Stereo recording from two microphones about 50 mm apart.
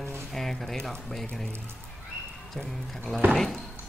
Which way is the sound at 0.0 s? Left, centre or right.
Right.